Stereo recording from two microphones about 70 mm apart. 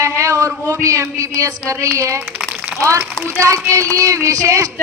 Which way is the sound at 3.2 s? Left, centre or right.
Right.